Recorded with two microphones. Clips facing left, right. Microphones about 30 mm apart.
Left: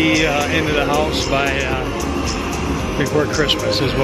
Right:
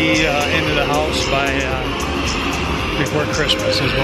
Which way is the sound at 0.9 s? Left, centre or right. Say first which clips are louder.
Even; centre.